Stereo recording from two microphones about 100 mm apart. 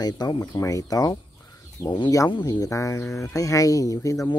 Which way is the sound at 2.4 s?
30° left (ahead or behind).